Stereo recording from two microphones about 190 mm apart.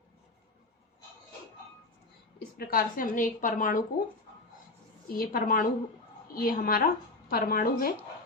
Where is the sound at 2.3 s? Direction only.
50° left (ahead or behind).